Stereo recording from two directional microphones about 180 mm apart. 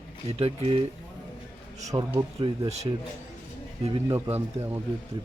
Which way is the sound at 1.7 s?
20° right (ahead or behind).